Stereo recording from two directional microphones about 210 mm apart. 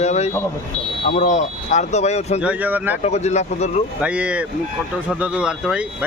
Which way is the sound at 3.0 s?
30° left (ahead or behind).